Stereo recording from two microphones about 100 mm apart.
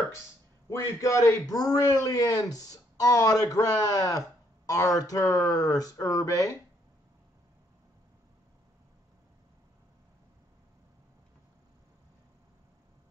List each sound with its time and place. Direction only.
0.7 s a man's voice: 30° left (ahead or behind)